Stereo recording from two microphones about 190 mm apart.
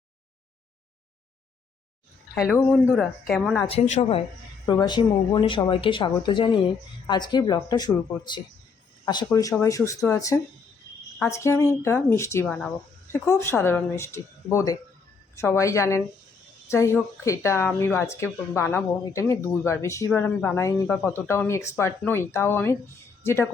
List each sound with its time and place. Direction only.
2.3 s speech: 5° left (ahead or behind)
3.7 s speech: 35° left (ahead or behind)
4.6 s speech: 20° left (ahead or behind)